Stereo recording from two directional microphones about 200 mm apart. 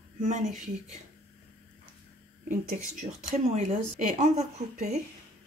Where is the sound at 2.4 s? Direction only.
40° right (ahead or behind).